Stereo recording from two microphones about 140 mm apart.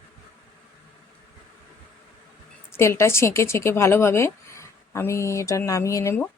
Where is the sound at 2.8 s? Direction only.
20° left (ahead or behind).